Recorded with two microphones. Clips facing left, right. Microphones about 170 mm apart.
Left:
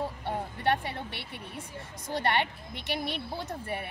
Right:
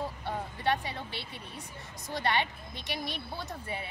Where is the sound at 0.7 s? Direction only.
60° left (ahead or behind).